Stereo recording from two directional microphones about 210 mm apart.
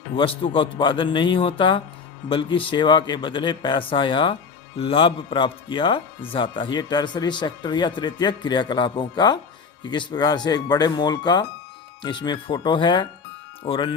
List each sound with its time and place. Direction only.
0.2 s speech: 25° left (ahead or behind)